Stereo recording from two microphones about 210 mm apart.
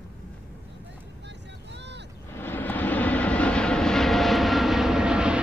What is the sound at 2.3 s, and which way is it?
Vehicle, 10° left (ahead or behind).